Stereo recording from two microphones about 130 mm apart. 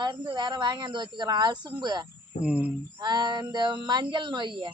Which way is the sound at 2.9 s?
35° right (ahead or behind).